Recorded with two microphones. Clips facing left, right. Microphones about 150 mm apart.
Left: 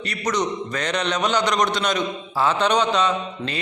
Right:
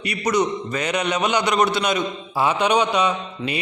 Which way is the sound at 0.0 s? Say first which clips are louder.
Right 3 dB; 10° right (ahead or behind).